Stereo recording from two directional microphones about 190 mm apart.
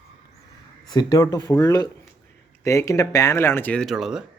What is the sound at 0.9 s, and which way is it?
Speech, 20° left (ahead or behind).